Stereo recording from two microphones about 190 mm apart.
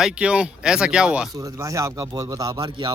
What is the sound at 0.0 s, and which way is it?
Speech, 5° right (ahead or behind).